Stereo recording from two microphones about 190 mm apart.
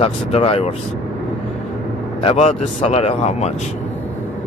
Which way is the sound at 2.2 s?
35° left (ahead or behind).